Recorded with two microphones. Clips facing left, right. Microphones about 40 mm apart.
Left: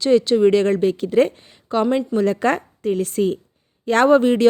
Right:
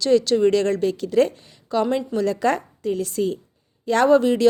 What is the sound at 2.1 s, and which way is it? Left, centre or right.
A woman's voice, left.